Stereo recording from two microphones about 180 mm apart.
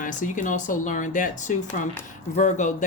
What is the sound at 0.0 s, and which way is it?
Speech, 45° left (ahead or behind).